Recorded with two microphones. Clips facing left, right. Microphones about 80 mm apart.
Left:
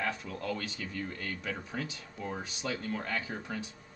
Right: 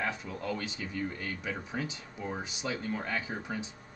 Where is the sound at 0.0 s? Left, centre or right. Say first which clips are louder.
Even; centre.